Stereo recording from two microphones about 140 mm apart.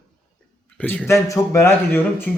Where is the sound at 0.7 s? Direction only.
10° left (ahead or behind).